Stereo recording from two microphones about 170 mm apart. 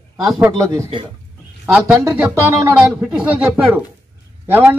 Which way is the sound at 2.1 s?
15° right (ahead or behind).